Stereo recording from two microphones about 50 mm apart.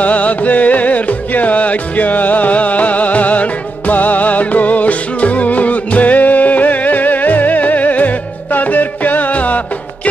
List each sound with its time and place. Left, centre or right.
0.0 s music: left